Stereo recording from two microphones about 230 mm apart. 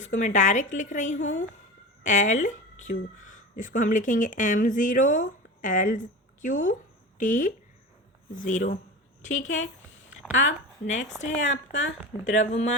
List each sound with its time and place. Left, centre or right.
0.0 s speech: left
11.2 s speech: left
11.7 s speech: left
12.2 s speech: left